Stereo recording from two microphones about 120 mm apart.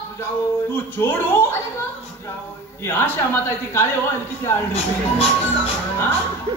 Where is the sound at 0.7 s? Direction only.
20° left (ahead or behind).